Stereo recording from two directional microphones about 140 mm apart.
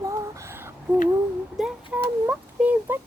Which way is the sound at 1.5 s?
5° right (ahead or behind).